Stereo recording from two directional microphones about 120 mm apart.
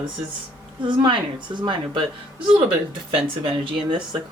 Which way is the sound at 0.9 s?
40° right (ahead or behind).